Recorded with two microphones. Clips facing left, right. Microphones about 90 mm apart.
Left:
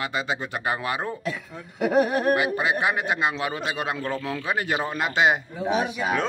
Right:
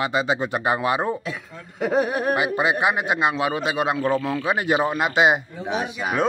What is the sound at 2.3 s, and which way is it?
A man's voice, 20° right (ahead or behind).